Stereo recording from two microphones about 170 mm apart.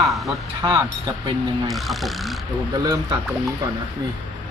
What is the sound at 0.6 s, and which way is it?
Speech, 25° right (ahead or behind).